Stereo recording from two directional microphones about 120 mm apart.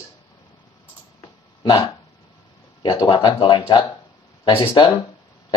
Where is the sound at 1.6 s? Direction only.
40° left (ahead or behind).